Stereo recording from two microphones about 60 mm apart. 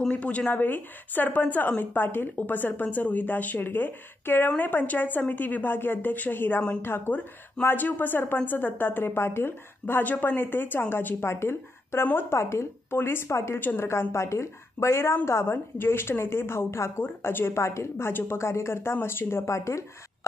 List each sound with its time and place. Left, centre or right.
0.1 s a woman's voice: left
13.6 s a woman's voice: left
13.8 s a woman's voice: left
17.0 s a woman's voice: left
19.4 s speech: left